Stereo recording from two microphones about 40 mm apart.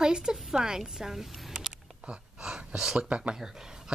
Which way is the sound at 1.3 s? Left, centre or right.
Centre.